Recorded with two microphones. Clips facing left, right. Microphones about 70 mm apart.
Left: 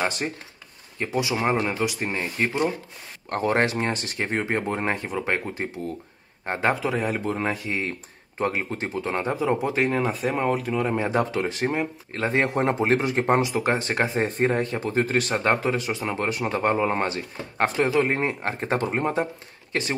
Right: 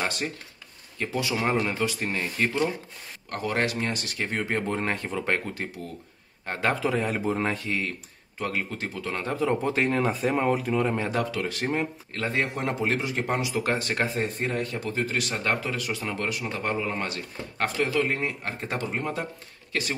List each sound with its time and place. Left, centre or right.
0.9 s speech: centre
3.3 s a man's voice: left
6.8 s speech: centre
8.4 s speech: left
9.2 s speech: centre
11.1 s speech: left
12.4 s speech: left
16.3 s speech: left
17.1 s speech: left